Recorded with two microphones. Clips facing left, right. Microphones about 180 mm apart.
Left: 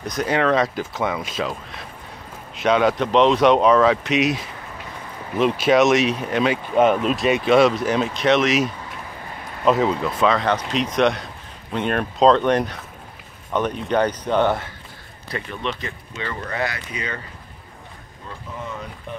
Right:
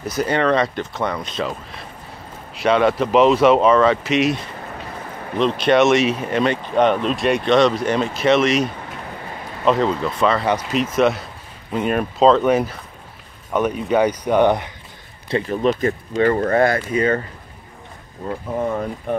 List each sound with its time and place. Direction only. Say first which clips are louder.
0.0 s speech: right 1 dB; 5° right (ahead or behind)
9.7 s speech: right 1 dB; 5° left (ahead or behind); by 14.7 s 15° right (ahead or behind)
15.2 s speech: right 9 dB; 30° right (ahead or behind)
16.2 s speech: right 11 dB; 45° right (ahead or behind)
18.2 s speech: right 11 dB; 55° right (ahead or behind)